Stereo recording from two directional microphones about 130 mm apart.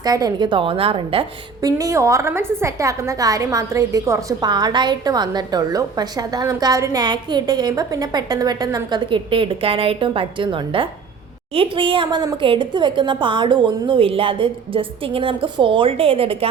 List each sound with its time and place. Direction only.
0.0 s a woman's voice: 30° right (ahead or behind)
1.6 s a woman's voice: 25° right (ahead or behind); by 16.5 s 45° right (ahead or behind)